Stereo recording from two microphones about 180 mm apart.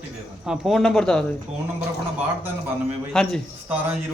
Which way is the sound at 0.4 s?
Centre (ahead or behind).